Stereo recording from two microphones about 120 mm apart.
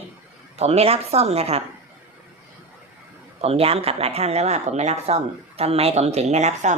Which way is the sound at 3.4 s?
55° right (ahead or behind).